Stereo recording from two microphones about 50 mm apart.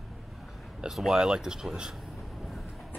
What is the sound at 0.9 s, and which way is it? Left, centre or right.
Speech, centre.